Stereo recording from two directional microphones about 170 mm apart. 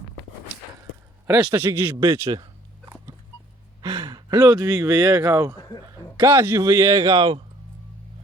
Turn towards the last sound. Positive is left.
turn(degrees=-30)  # may be behind; listen again after turning